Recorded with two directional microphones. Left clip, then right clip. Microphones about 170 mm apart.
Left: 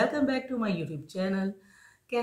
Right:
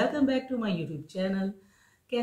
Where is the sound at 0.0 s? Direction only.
15° left (ahead or behind).